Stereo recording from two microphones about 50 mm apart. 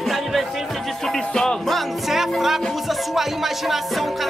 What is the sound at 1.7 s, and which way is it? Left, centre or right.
Speech, centre.